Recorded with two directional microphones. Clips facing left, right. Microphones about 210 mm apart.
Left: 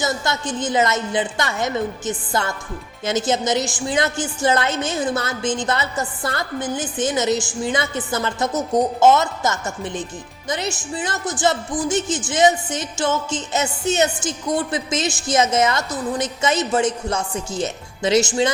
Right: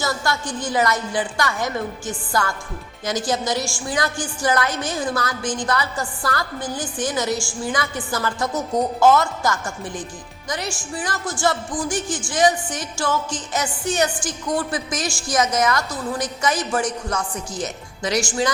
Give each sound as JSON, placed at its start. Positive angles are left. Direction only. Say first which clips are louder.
{"t": 0.0, "sound": "music", "louder": "left 1 dB", "side_deg": 20}